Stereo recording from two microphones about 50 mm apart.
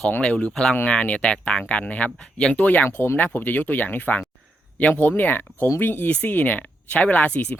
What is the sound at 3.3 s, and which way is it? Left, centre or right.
Speech, left.